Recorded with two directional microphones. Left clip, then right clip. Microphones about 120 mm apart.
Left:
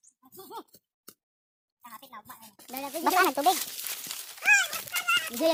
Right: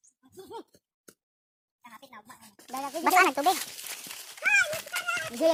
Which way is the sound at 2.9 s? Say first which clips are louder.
Right 2 dB; 5° left (ahead or behind).